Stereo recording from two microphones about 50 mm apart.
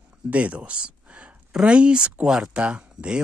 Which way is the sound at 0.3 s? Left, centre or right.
Right.